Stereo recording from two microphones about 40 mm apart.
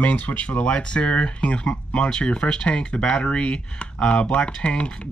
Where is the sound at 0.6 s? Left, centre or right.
Left.